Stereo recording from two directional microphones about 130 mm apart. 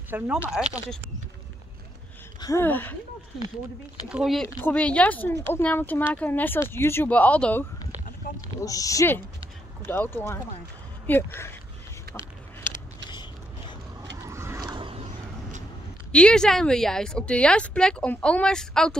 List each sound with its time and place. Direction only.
0.1 s speech: 15° right (ahead or behind)
0.5 s a woman's voice: 5° right (ahead or behind)
2.6 s speech: 15° left (ahead or behind)
4.1 s a woman's voice: centre (ahead or behind)
4.6 s speech: 10° left (ahead or behind)
8.5 s speech: 25° left (ahead or behind)
13.1 s a sound: 35° left (ahead or behind)
14.2 s a sound: 20° right (ahead or behind)
14.7 s vehicle: 40° right (ahead or behind)
16.1 s a woman's voice: 5° left (ahead or behind)